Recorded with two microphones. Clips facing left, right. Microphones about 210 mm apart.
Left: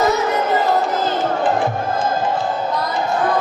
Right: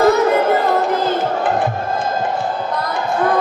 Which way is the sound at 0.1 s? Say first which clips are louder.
Right 4 dB; 55° right (ahead or behind).